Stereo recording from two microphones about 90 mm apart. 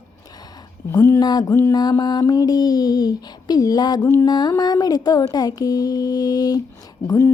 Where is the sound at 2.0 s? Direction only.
50° left (ahead or behind).